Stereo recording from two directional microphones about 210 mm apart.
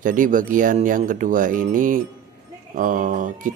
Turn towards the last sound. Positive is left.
turn(degrees=-40)  # may be behind; listen again after turning